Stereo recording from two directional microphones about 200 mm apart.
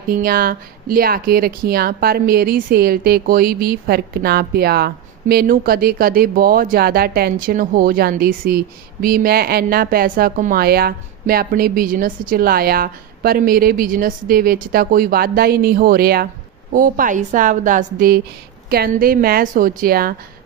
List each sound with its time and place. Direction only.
0.1 s a woman's voice: 45° right (ahead or behind)